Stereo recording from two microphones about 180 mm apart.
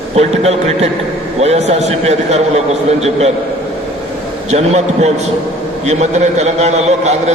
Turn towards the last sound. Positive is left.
turn(degrees=-40)  # may be behind; listen again after turning